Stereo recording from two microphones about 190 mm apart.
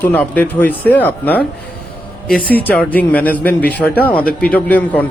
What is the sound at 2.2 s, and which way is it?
Speech, 50° left (ahead or behind).